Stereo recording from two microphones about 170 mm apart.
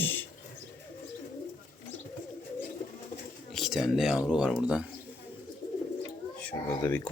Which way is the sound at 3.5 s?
Centre (ahead or behind).